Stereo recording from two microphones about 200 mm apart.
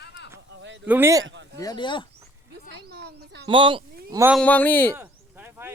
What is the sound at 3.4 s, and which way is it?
Speech, 25° right (ahead or behind).